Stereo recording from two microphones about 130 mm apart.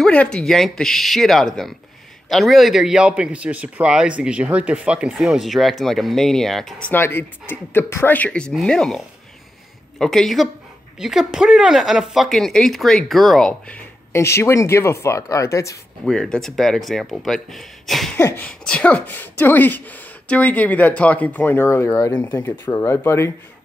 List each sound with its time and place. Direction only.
0.0 s a man's voice: 10° left (ahead or behind)
6.9 s a man's voice: 15° left (ahead or behind)
14.1 s speech: 20° left (ahead or behind)
16.1 s a man's voice: 5° left (ahead or behind)
18.1 s speech: 15° left (ahead or behind)
22.2 s speech: 15° left (ahead or behind)